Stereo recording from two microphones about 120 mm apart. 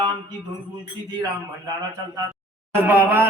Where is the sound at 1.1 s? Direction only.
35° right (ahead or behind).